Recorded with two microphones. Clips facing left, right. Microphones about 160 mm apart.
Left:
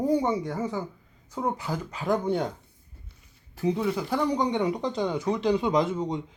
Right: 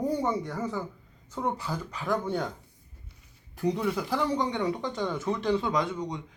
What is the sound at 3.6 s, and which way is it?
Speech, 5° left (ahead or behind).